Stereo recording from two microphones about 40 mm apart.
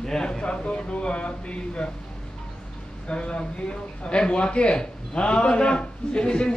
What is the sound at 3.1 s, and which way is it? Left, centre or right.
Speech, left.